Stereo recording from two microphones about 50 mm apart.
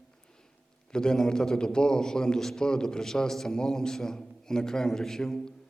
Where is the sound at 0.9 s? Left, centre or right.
Centre.